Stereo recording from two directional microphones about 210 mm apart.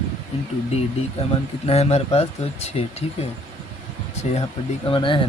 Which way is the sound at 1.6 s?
30° left (ahead or behind).